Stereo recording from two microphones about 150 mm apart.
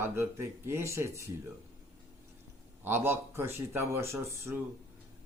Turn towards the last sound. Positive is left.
turn(degrees=-15)  # may be behind; listen again after turning